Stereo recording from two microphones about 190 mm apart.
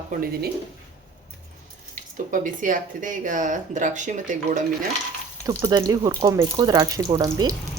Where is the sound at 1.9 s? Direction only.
45° right (ahead or behind).